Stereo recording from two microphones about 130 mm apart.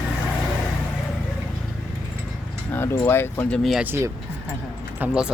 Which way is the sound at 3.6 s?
Centre (ahead or behind).